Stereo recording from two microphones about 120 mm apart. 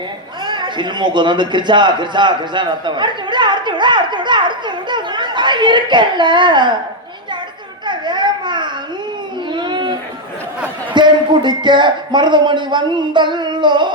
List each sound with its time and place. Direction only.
0.4 s a man's voice: 40° right (ahead or behind)
7.9 s a sound: 40° right (ahead or behind)
10.9 s speech: 40° right (ahead or behind)